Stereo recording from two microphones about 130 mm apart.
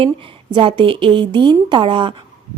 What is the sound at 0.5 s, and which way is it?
Speech, 40° right (ahead or behind).